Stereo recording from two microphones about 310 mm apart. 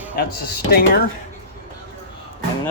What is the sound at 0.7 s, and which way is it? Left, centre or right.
Speech, left.